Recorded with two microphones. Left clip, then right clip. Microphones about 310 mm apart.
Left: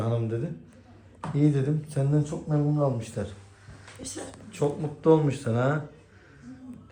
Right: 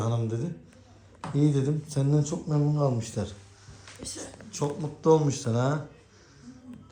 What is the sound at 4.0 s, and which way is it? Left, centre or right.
Speech, centre.